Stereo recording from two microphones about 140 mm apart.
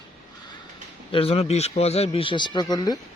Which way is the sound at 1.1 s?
45° left (ahead or behind).